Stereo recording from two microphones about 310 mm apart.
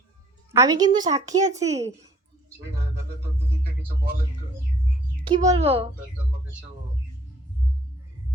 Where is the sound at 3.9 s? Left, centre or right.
Right.